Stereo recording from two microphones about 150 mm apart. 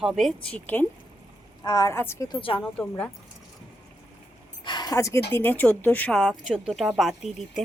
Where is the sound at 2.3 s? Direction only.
35° left (ahead or behind).